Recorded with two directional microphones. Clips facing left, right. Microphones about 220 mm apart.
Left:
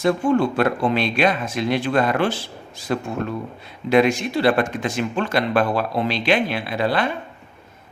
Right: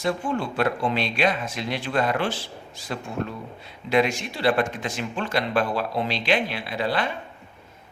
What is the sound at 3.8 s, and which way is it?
Speech, 50° left (ahead or behind).